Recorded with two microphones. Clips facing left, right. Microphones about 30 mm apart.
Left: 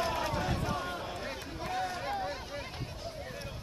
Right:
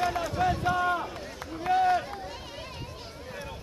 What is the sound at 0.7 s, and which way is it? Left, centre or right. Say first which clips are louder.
Run: right 9 dB; centre.